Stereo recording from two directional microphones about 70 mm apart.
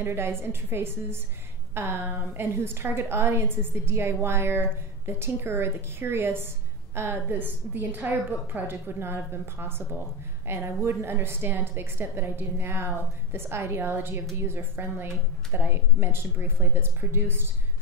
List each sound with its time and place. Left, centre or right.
0.0 s a woman's voice: right